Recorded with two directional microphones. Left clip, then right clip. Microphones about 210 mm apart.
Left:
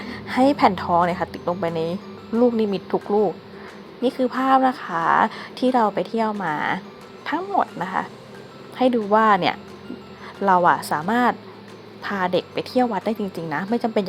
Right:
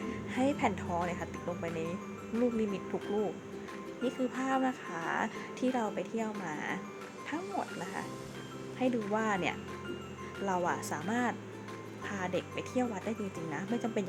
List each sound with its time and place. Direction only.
0.3 s a woman's voice: 20° left (ahead or behind)
2.9 s a woman's voice: 20° left (ahead or behind)